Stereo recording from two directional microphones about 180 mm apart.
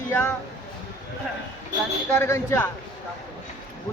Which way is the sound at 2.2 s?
15° left (ahead or behind).